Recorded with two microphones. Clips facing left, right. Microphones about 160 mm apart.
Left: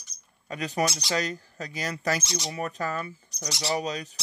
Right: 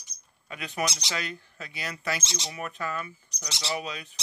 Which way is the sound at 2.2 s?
20° right (ahead or behind).